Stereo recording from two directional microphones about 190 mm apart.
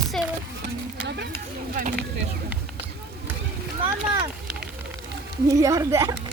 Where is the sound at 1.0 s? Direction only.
65° right (ahead or behind).